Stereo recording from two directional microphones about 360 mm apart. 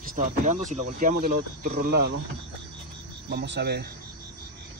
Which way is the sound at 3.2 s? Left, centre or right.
Right.